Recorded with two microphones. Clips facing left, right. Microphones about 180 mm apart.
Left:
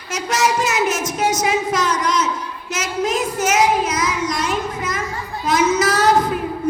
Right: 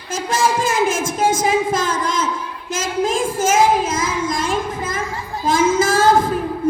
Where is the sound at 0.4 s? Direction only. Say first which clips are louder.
Right 1 dB; 30° right (ahead or behind).